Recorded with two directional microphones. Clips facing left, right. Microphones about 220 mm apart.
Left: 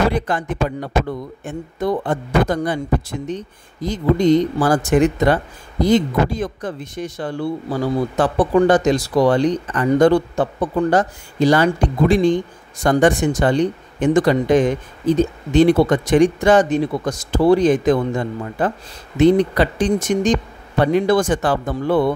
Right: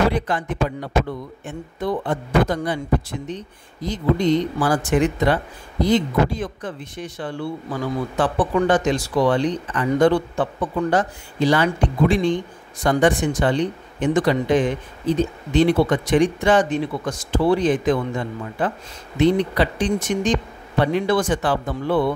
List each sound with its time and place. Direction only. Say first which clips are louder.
0.1 s speech: left 2 dB; 45° left (ahead or behind)